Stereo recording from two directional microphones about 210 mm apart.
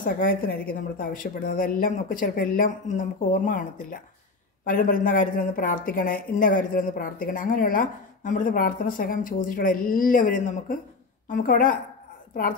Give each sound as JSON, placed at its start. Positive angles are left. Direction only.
{"t": 0.0, "sound": "a woman's voice", "side_deg": 45}